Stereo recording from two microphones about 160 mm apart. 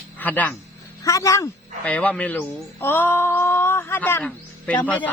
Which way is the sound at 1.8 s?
10° left (ahead or behind).